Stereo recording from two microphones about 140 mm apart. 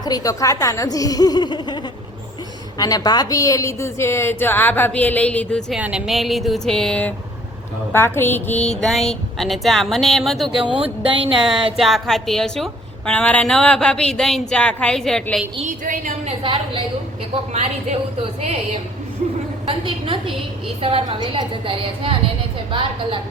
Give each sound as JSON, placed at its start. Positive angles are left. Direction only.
{"t": 0.0, "sound": "a woman's voice", "side_deg": 25}
{"t": 7.9, "sound": "a woman's voice", "side_deg": 15}
{"t": 8.8, "sound": "a woman's voice", "side_deg": 0}
{"t": 11.0, "sound": "a woman's voice", "side_deg": -40}
{"t": 11.8, "sound": "a woman's voice", "side_deg": 0}
{"t": 15.6, "sound": "a woman's voice", "side_deg": -70}
{"t": 16.2, "sound": "a woman's voice", "side_deg": -40}
{"t": 17.5, "sound": "a woman's voice", "side_deg": -55}
{"t": 19.6, "sound": "a woman's voice", "side_deg": -40}